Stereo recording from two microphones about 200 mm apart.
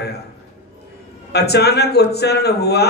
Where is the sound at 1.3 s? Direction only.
55° left (ahead or behind).